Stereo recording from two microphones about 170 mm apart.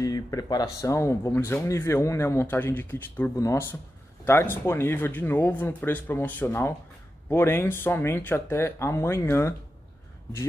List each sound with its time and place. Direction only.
0.0 s speech: 20° left (ahead or behind)